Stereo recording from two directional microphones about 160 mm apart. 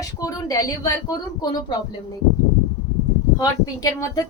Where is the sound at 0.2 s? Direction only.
20° left (ahead or behind).